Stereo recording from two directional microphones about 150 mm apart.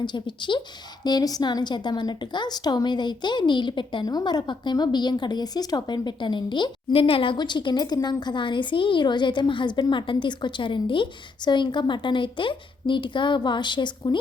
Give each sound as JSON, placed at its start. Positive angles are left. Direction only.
{"t": 0.0, "sound": "a woman's voice", "side_deg": 30}